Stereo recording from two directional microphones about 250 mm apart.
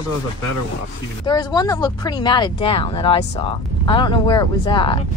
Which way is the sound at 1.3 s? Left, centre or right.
Centre.